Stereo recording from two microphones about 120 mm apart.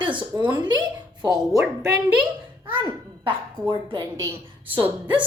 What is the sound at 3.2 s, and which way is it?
A woman's voice, 40° right (ahead or behind).